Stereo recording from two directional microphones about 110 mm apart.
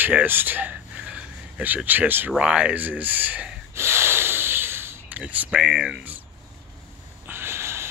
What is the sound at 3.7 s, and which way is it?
Snort, 25° right (ahead or behind).